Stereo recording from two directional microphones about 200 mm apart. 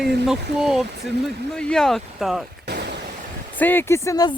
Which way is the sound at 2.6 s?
55° right (ahead or behind).